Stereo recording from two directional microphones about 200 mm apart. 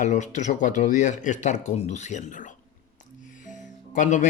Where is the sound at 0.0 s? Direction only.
35° left (ahead or behind).